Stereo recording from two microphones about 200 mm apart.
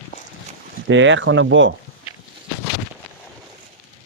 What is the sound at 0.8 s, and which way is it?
Speech, 70° right (ahead or behind).